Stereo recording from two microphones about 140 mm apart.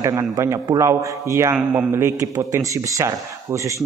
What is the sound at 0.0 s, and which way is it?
A man's voice, 25° right (ahead or behind).